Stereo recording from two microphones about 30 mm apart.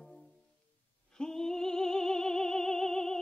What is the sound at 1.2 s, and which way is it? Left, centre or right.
Music, left.